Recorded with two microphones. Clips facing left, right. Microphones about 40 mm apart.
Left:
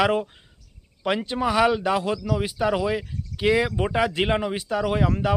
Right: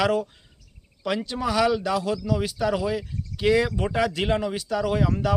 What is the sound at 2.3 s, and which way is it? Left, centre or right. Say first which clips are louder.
Speech: left 1 dB; centre.